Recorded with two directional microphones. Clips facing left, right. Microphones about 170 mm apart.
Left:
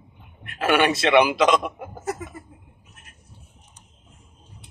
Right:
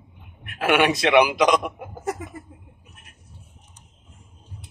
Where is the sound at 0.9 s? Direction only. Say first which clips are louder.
Even; 15° right (ahead or behind).